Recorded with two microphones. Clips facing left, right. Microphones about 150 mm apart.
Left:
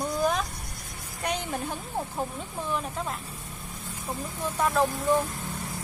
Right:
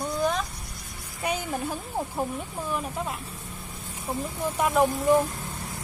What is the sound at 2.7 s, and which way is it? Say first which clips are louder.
Speech: right 1 dB; 5° right (ahead or behind).